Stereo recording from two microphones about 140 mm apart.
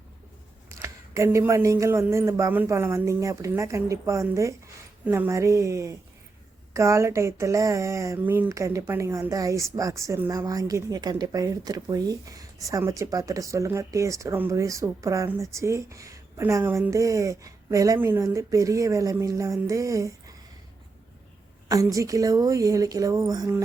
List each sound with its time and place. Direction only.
0.7 s speech: 20° right (ahead or behind)
21.7 s speech: 25° right (ahead or behind)